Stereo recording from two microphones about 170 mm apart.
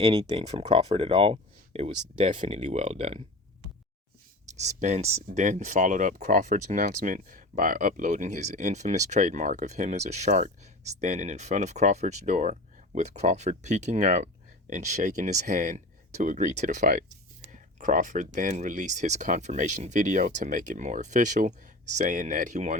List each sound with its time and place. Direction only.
0.0 s speech: 30° right (ahead or behind)
4.5 s speech: 45° right (ahead or behind)